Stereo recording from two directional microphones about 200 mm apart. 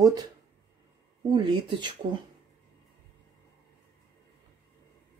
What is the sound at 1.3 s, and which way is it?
Speech, 20° right (ahead or behind).